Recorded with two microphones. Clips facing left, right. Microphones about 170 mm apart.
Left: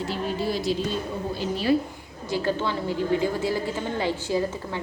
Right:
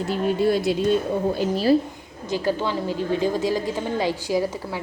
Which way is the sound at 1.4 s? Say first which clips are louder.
Right 1 dB; 40° right (ahead or behind).